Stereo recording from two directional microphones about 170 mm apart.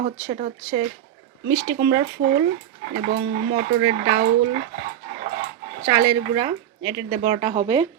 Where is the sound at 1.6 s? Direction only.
65° right (ahead or behind).